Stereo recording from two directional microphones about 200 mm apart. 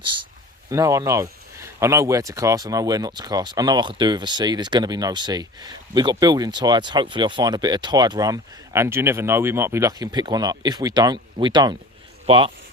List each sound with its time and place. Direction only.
0.7 s speech: 15° right (ahead or behind)